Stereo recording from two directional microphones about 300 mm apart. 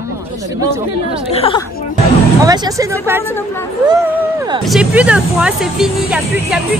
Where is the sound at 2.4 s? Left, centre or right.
Centre.